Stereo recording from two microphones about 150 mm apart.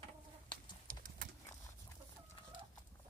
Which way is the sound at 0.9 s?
65° right (ahead or behind).